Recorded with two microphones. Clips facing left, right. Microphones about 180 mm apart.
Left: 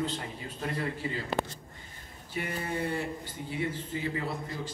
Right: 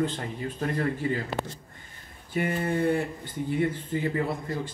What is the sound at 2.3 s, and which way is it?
Mantra, 50° right (ahead or behind).